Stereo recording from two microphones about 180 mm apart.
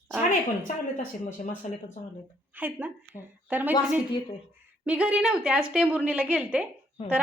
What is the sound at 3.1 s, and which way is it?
Speech, 30° left (ahead or behind).